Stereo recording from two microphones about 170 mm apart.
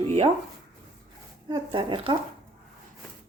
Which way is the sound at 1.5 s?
30° right (ahead or behind).